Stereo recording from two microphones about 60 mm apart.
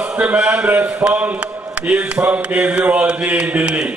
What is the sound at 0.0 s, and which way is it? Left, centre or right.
A man's voice, right.